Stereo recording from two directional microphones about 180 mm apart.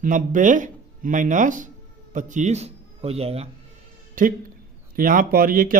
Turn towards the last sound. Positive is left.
turn(degrees=-50)  # may be behind; listen again after turning